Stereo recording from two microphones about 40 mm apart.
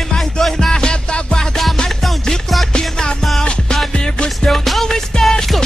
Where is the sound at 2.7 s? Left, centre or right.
Left.